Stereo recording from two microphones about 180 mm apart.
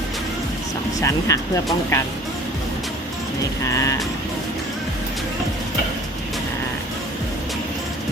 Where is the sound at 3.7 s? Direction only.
15° left (ahead or behind).